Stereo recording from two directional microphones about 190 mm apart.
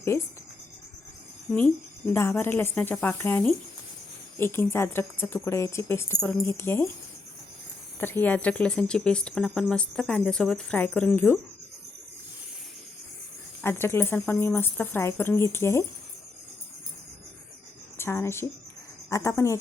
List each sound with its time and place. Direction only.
2.1 s a woman's voice: 10° left (ahead or behind)
7.9 s speech: 10° left (ahead or behind)
13.6 s a woman's voice: 10° left (ahead or behind)
17.9 s a woman's voice: 15° left (ahead or behind)